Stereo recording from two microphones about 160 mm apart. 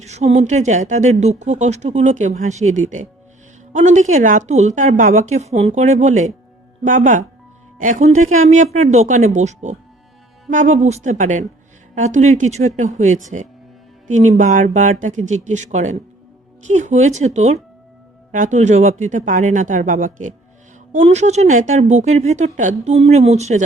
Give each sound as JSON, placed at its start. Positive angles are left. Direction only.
{"t": 0.0, "sound": "a woman's voice", "side_deg": -45}